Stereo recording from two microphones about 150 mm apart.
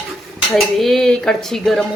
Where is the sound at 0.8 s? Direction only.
Centre (ahead or behind).